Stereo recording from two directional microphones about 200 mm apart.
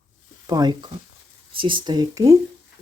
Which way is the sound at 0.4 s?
20° right (ahead or behind).